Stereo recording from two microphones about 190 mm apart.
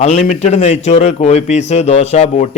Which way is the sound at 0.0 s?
35° left (ahead or behind).